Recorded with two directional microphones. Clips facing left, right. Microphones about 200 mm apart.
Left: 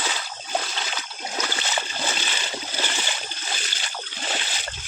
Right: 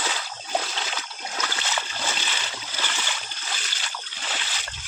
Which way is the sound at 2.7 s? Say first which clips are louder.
Left 1 dB; 25° left (ahead or behind).